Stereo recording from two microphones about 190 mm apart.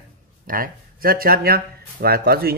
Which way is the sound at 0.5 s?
50° right (ahead or behind).